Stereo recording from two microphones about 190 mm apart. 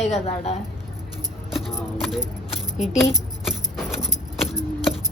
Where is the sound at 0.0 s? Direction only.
35° left (ahead or behind).